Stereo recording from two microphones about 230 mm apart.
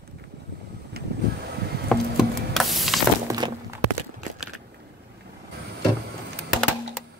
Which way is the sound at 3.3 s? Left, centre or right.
Centre.